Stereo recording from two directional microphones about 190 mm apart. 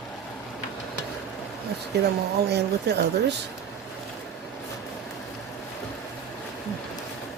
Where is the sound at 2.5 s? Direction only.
60° right (ahead or behind).